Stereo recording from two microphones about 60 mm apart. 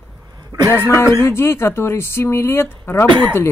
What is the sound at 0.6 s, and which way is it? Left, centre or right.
Speech, left.